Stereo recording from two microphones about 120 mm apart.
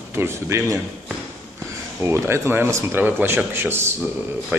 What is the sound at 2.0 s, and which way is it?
Speech, 20° right (ahead or behind).